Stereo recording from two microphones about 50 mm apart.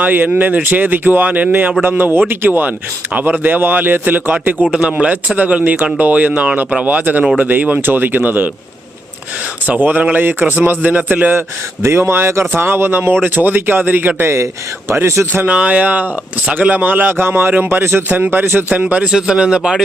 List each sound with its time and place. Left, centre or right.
0.0 s speech: right
4.8 s a man's voice: centre
5.0 s speech: right
9.6 s speech: right
11.3 s speech: right
14.2 s speech: right
15.4 s speech: right
18.7 s a man's voice: right
19.1 s a man's voice: centre